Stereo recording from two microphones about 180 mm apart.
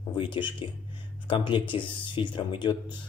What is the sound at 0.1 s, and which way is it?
Speech, 25° left (ahead or behind).